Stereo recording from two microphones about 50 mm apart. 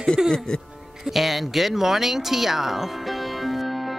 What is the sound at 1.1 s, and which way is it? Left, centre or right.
Speech, centre.